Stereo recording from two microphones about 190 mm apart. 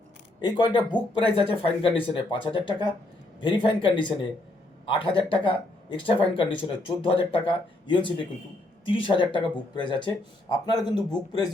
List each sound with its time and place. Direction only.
0.4 s speech: 25° left (ahead or behind)